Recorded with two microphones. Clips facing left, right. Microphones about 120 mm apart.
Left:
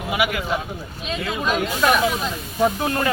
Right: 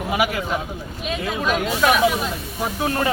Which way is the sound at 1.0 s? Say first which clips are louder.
Right 1 dB; 5° right (ahead or behind).